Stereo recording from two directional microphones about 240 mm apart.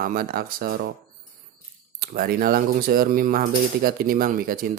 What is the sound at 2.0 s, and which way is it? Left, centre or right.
Speech, right.